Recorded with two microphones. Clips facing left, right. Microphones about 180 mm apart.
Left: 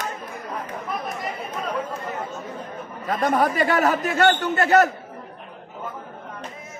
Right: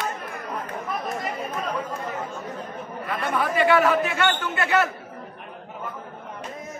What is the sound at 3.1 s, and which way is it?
A man's voice, 40° left (ahead or behind).